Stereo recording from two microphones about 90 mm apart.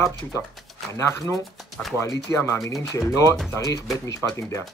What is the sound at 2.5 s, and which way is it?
Speech, 35° left (ahead or behind).